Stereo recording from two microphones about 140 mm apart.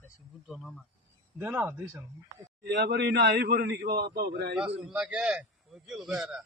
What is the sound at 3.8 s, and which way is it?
Speech, 90° right.